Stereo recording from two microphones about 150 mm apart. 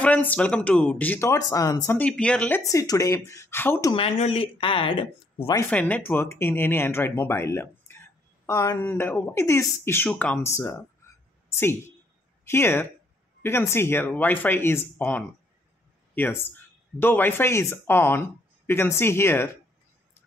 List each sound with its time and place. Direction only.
0.0 s speech: 10° left (ahead or behind)
2.0 s speech: 5° left (ahead or behind)
2.6 s speech: 20° left (ahead or behind)
3.9 s speech: 40° left (ahead or behind)
5.6 s speech: 10° left (ahead or behind)
12.4 s speech: 15° left (ahead or behind)